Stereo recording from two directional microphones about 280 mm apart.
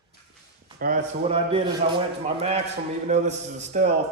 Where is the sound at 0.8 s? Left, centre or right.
Right.